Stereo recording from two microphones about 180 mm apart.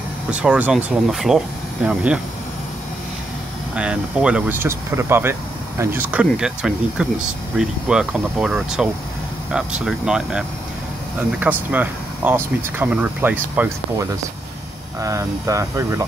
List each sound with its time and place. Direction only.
0.3 s speech: 5° right (ahead or behind)
3.7 s speech: 5° right (ahead or behind)
9.8 s speech: 5° right (ahead or behind)